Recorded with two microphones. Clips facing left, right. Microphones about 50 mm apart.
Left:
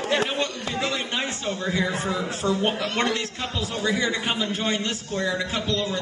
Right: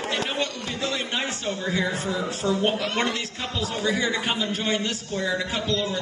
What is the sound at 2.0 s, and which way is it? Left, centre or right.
Speech, left.